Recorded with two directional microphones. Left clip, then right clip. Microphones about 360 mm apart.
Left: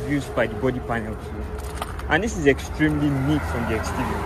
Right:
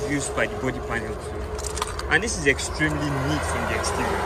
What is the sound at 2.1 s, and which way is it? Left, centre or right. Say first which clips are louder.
Speech: left 2 dB; centre.